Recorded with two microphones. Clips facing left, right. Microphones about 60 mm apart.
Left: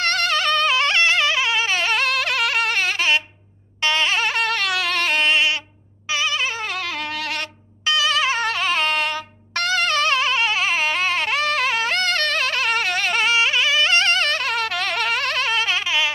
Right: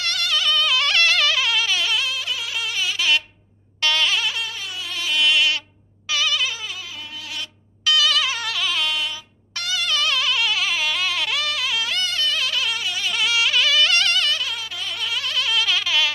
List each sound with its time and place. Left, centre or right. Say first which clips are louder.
0.0 s music: left 4 dB; left
3.8 s a sound: left 1 dB; left
4.2 s a sound: left 7 dB; left
5.2 s sheep: right 2 dB; left
6.0 s goat: left 1 dB; left
6.6 s wind instrument: left 8 dB; left
7.8 s music: left 1 dB; left